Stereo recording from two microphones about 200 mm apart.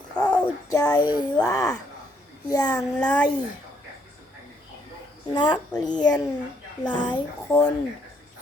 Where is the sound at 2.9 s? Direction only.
5° left (ahead or behind).